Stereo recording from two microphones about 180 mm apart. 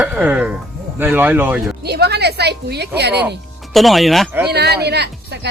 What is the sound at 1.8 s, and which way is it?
Speech, 65° right (ahead or behind).